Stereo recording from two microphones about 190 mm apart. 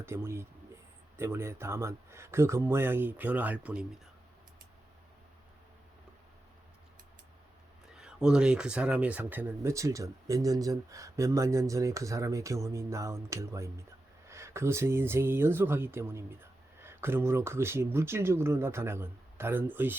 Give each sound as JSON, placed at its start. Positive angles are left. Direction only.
{"t": 0.0, "sound": "speech", "side_deg": -15}
{"t": 7.9, "sound": "speech", "side_deg": -5}